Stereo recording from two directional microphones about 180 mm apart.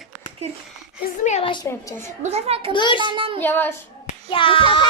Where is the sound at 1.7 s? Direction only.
15° left (ahead or behind).